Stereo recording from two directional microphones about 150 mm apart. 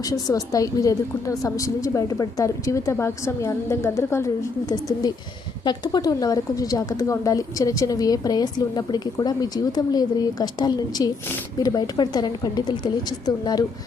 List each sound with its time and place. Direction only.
0.0 s a woman's voice: 25° left (ahead or behind)